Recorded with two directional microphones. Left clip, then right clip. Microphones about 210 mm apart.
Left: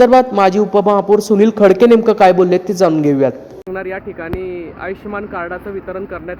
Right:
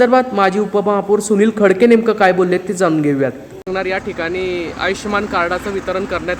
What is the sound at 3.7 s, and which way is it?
Speech, 10° right (ahead or behind).